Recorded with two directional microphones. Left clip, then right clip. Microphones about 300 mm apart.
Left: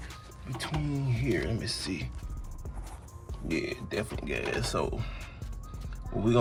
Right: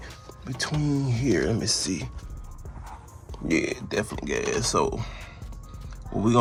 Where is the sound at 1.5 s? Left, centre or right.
Centre.